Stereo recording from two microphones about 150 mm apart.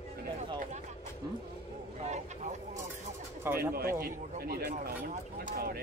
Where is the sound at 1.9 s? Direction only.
50° right (ahead or behind).